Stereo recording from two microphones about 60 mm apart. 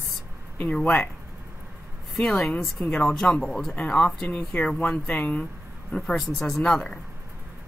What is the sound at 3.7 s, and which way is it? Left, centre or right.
Speech, centre.